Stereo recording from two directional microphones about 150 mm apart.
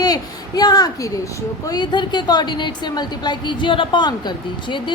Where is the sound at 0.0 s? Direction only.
25° left (ahead or behind).